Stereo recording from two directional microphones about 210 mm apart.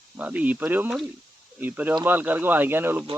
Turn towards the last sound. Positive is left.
turn(degrees=-10)  # may be behind; listen again after turning